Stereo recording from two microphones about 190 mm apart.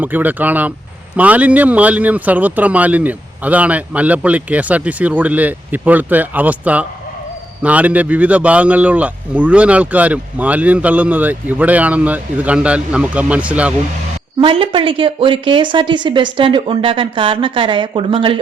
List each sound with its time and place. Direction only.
0.0 s speech: 10° right (ahead or behind)
14.4 s a woman's voice: 25° right (ahead or behind)